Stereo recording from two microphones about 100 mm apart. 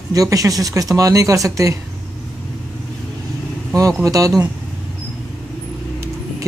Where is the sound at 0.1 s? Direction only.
35° right (ahead or behind).